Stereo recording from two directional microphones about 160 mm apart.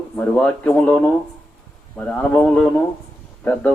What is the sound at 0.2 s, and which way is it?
Speech, 5° left (ahead or behind).